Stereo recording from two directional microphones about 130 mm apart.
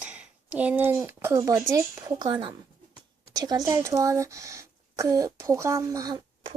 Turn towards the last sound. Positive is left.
turn(degrees=-30)  # may be behind; listen again after turning